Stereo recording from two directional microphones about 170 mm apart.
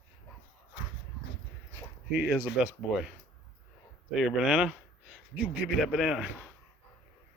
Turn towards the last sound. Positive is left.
turn(degrees=-5)  # may be behind; listen again after turning